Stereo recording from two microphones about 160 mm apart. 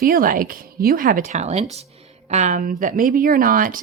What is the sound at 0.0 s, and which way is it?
Speech, 60° right (ahead or behind).